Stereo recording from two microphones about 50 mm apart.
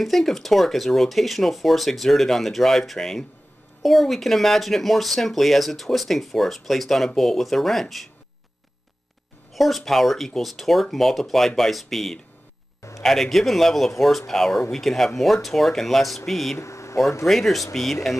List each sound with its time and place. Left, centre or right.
0.0 s speech: centre
9.5 s speech: centre
16.5 s a sound: left
17.3 s speech: centre